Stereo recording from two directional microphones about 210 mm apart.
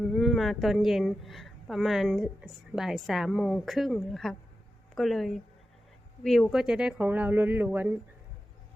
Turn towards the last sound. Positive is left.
turn(degrees=-10)  # may be behind; listen again after turning